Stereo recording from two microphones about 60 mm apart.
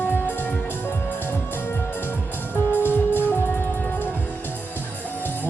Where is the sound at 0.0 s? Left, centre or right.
Left.